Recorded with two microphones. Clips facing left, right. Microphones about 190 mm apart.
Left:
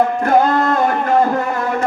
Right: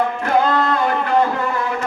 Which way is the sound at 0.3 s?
45° left (ahead or behind).